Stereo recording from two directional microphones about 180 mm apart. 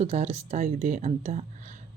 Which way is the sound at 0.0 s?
35° right (ahead or behind).